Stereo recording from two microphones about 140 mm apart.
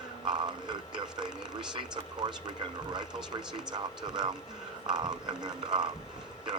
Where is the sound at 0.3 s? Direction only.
30° right (ahead or behind).